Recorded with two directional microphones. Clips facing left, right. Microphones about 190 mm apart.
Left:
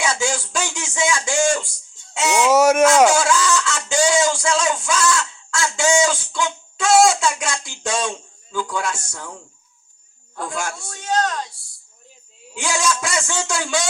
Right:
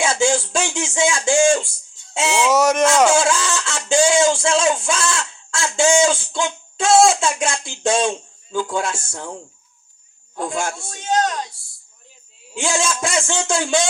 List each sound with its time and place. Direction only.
0.0 s speech: 25° right (ahead or behind)
2.4 s speech: 10° left (ahead or behind)
3.2 s a sound: 25° right (ahead or behind)
9.0 s speech: 25° right (ahead or behind)
10.3 s a sound: 25° right (ahead or behind)
12.5 s speech: 25° right (ahead or behind)